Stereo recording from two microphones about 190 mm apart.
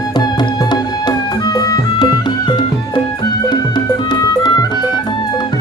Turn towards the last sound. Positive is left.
turn(degrees=20)  # may be behind; listen again after turning